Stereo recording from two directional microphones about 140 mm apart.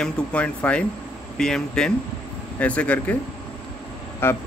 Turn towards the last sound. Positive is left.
turn(degrees=15)  # may be behind; listen again after turning